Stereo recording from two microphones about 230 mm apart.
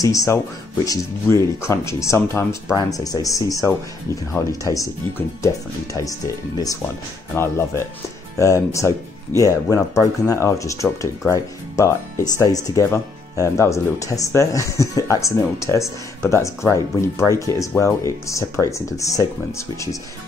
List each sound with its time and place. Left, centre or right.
0.0 s speech: centre